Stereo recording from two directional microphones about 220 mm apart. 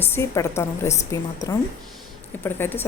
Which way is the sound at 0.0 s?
10° left (ahead or behind).